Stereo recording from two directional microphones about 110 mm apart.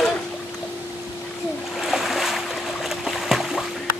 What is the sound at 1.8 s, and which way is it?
Boat, centre (ahead or behind).